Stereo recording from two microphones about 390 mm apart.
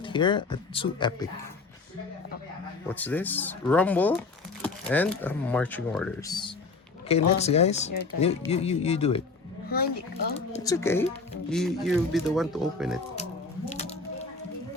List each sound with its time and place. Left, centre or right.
0.0 s speech: centre
2.9 s speech: centre
13.7 s a sound: centre